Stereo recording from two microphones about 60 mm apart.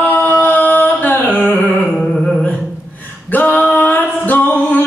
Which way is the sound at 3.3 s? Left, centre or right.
Left.